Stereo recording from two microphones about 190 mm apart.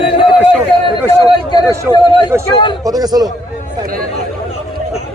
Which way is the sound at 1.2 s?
20° left (ahead or behind).